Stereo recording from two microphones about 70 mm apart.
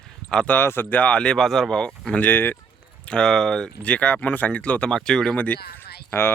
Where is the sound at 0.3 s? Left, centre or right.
Centre.